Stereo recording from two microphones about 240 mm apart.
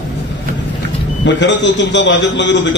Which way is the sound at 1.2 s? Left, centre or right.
Left.